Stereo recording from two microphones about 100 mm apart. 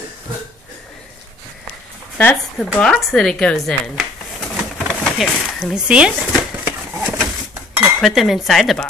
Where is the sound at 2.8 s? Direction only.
5° left (ahead or behind).